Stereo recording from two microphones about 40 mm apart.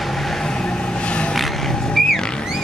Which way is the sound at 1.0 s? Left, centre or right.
Left.